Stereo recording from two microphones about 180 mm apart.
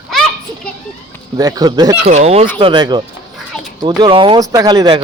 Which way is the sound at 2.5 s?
25° right (ahead or behind).